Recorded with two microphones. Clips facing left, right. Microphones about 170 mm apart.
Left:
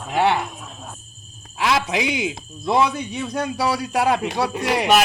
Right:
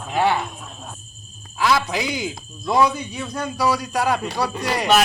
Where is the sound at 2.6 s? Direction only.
25° left (ahead or behind).